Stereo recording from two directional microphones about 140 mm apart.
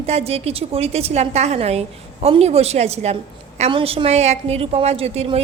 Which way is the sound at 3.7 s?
40° right (ahead or behind).